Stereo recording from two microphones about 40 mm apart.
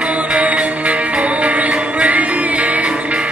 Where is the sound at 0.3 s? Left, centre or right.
Right.